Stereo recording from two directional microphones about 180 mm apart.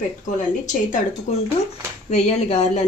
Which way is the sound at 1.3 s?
40° left (ahead or behind).